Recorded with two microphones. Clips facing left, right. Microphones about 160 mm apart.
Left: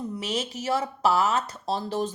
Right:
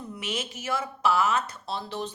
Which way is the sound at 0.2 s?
35° left (ahead or behind).